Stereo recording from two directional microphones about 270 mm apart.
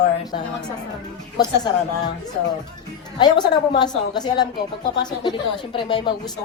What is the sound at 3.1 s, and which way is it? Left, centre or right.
A woman's voice, centre.